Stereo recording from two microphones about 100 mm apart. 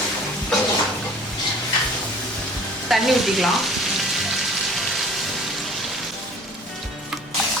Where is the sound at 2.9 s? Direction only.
Centre (ahead or behind).